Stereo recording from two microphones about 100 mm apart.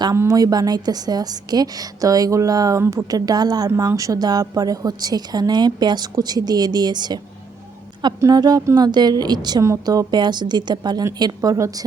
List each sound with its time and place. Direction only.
0.2 s a woman's voice: 35° right (ahead or behind)
2.8 s a woman's voice: 25° right (ahead or behind)
3.1 s a woman's voice: 40° right (ahead or behind)
8.3 s a woman's voice: 40° right (ahead or behind)